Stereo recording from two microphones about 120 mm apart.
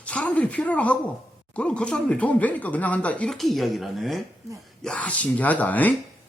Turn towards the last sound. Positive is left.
turn(degrees=15)  # may be behind; listen again after turning